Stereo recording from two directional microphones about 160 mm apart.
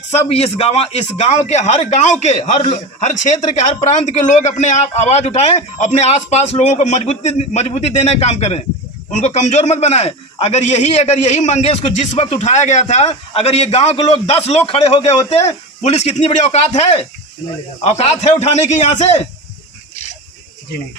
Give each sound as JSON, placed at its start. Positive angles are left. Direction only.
{"t": 0.1, "sound": "speech", "side_deg": 40}